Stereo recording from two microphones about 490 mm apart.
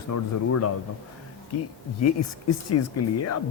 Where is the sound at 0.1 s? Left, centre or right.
Left.